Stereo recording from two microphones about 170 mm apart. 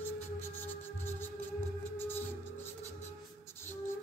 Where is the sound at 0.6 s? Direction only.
10° left (ahead or behind).